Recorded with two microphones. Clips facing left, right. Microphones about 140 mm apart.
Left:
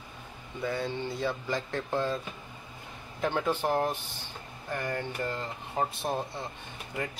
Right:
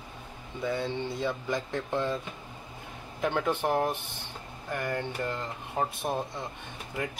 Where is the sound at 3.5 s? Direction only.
15° right (ahead or behind).